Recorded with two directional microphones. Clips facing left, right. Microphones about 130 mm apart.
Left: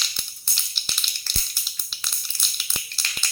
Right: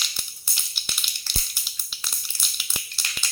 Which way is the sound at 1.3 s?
15° right (ahead or behind).